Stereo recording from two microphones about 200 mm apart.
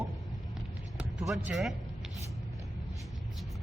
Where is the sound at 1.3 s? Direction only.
Centre (ahead or behind).